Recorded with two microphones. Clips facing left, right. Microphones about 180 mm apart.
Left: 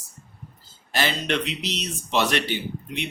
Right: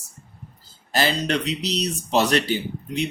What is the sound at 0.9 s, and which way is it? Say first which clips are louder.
Speech: right 3 dB; 35° right (ahead or behind).